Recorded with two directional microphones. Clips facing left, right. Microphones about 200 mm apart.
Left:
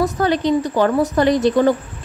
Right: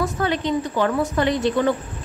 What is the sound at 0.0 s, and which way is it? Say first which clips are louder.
A woman's voice: left 5 dB; 40° left (ahead or behind).